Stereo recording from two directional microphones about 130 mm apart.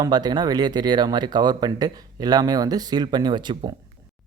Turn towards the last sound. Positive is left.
turn(degrees=-35)  # may be behind; listen again after turning